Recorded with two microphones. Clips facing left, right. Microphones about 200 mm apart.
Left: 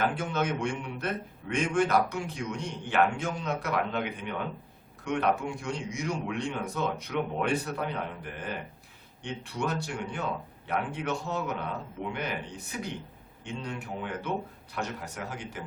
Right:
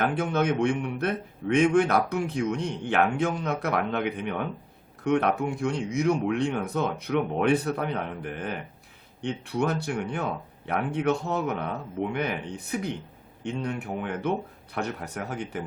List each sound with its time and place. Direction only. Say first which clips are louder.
0.0 s speech: right 4 dB; 60° right (ahead or behind)